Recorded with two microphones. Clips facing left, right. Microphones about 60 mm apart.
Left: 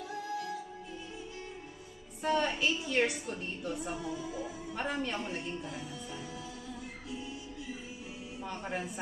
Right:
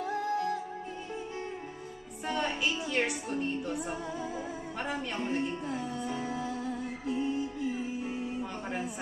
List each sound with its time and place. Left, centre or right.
0.0 s music: right
2.2 s a woman's voice: centre
4.1 s music: right
4.7 s a man's voice: centre
5.2 s music: right
8.6 s a sound: centre